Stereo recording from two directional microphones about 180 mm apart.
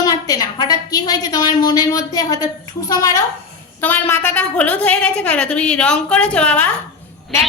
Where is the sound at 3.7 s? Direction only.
10° left (ahead or behind).